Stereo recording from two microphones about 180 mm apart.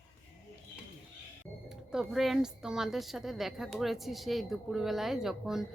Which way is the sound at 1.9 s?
Centre (ahead or behind).